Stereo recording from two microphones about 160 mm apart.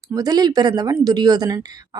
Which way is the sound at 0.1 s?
25° right (ahead or behind).